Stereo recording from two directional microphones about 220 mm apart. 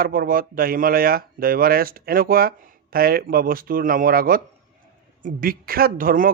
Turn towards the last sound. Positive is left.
turn(degrees=-40)  # may be behind; listen again after turning